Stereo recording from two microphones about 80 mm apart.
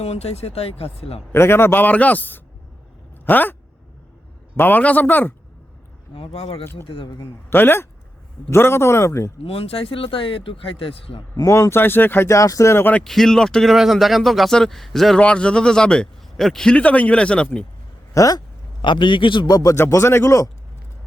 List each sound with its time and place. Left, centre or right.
1.3 s a man's voice: left
4.5 s a man's voice: left
6.8 s speech: left
7.5 s a man's voice: left
9.9 s speech: left
11.4 s a man's voice: left
12.3 s speech: left
13.1 s a man's voice: centre
16.7 s a man's voice: centre
18.1 s speech: left
18.8 s speech: left
19.5 s speech: left
19.7 s speech: left